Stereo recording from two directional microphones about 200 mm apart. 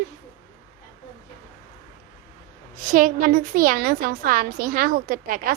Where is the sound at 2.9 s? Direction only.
40° right (ahead or behind).